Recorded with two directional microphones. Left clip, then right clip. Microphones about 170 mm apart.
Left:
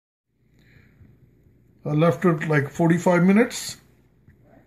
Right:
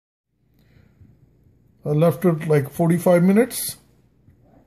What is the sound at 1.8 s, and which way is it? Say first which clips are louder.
Speech: right 2 dB; 35° right (ahead or behind).